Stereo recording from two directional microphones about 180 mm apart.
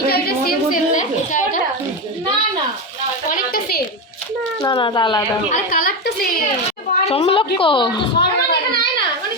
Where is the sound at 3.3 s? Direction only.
55° left (ahead or behind).